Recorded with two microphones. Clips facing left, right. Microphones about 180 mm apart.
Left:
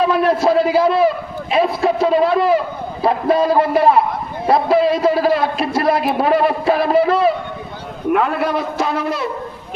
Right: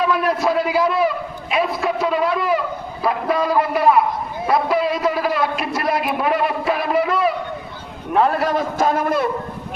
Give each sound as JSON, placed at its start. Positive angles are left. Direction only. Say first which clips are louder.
{"t": 0.0, "sound": "a man's voice", "louder": "left 4 dB", "side_deg": 30}
{"t": 8.1, "sound": "a man's voice", "louder": "even", "side_deg": -40}